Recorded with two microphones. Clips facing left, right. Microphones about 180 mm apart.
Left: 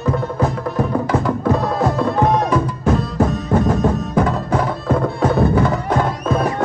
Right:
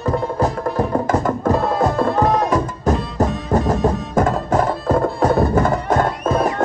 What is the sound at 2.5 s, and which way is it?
Music, 40° right (ahead or behind).